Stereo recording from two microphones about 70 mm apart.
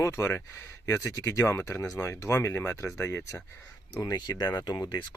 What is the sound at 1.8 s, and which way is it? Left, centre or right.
Speech, left.